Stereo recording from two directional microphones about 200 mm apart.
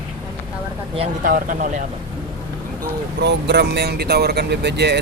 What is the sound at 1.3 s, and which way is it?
Speech, 45° right (ahead or behind).